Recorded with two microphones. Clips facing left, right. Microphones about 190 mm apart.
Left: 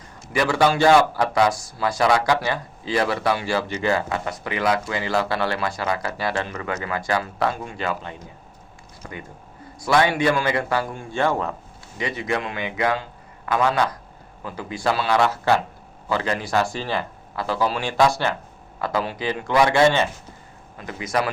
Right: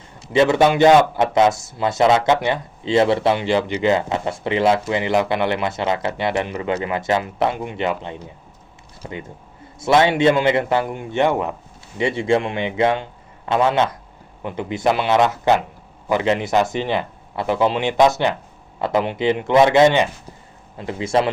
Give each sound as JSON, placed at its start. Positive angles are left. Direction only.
{"t": 0.3, "sound": "speech", "side_deg": -20}
{"t": 11.9, "sound": "speech", "side_deg": -25}